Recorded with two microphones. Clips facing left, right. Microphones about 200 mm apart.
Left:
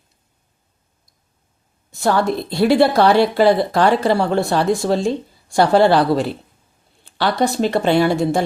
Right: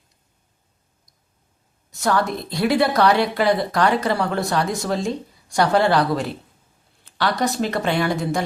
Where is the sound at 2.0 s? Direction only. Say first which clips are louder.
Left 4 dB; 30° left (ahead or behind).